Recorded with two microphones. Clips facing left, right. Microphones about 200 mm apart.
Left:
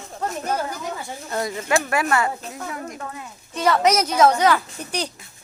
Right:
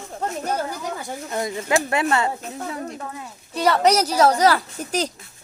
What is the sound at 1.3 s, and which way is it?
A woman's voice, 20° right (ahead or behind).